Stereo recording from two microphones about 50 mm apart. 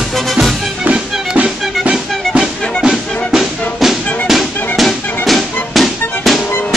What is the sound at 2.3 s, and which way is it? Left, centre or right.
Music, centre.